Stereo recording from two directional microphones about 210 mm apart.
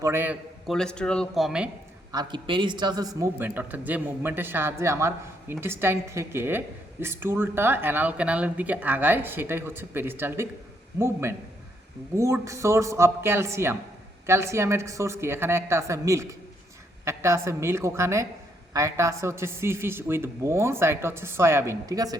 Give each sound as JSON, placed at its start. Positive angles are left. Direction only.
{"t": 0.0, "sound": "a man's voice", "side_deg": -10}
{"t": 0.7, "sound": "speech", "side_deg": 5}
{"t": 2.1, "sound": "a man's voice", "side_deg": -20}